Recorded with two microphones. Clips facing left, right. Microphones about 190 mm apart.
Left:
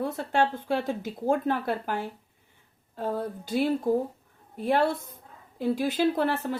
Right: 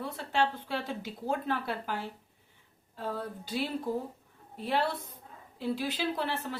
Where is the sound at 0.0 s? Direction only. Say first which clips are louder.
Left 5 dB; 50° left (ahead or behind).